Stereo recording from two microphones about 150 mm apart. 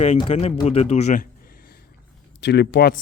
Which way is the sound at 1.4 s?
85° left.